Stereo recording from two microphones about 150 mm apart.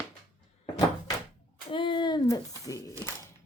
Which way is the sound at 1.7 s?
35° left (ahead or behind).